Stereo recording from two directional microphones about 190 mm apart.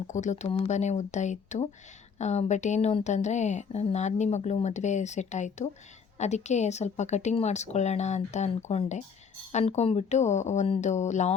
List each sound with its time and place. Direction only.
0.1 s a woman's voice: 40° left (ahead or behind)